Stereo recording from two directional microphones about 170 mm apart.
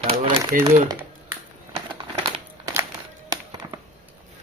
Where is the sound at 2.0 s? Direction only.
30° right (ahead or behind).